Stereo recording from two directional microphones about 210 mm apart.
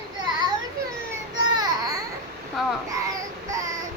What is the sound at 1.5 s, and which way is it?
Baby cry, 20° right (ahead or behind).